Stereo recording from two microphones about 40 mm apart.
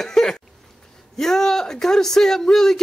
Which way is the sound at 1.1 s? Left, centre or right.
Centre.